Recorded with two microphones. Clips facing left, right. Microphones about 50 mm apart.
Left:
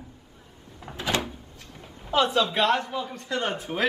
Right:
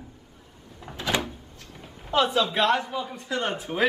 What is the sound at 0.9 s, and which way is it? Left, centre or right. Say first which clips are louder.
Door: even; centre.